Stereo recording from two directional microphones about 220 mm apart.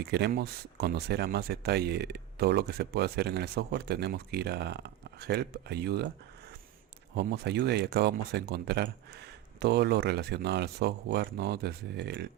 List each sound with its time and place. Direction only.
0.0 s speech: 45° right (ahead or behind)
7.2 s speech: 50° right (ahead or behind)